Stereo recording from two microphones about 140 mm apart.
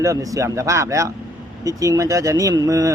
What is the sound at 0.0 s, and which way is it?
A man's voice, 25° right (ahead or behind).